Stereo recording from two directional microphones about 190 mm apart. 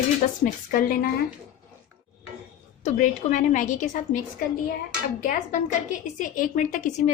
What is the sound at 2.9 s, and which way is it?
A woman's voice, 40° left (ahead or behind).